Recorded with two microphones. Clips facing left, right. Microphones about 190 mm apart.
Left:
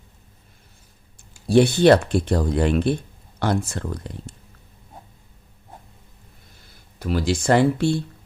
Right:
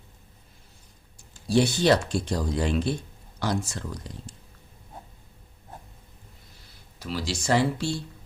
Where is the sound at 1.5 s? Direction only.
60° left (ahead or behind).